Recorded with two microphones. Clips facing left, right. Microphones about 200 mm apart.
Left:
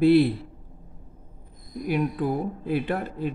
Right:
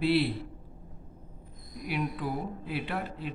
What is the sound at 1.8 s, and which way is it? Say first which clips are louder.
Speech: left 7 dB; 45° left (ahead or behind).